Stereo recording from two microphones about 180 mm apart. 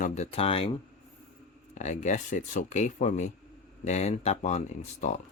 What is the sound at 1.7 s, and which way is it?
Speech, 40° left (ahead or behind).